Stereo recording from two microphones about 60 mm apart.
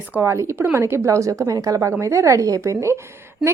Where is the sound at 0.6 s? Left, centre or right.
Right.